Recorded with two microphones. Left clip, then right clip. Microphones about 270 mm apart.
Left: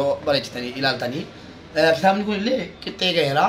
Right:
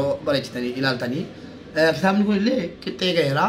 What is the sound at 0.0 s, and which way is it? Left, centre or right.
A man's voice, centre.